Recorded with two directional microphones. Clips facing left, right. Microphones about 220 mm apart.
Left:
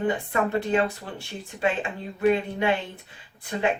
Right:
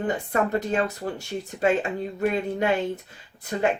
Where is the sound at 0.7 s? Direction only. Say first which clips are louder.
Left 1 dB; 40° right (ahead or behind).